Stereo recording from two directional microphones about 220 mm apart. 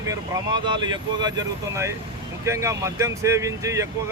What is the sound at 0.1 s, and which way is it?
Speech, 20° right (ahead or behind).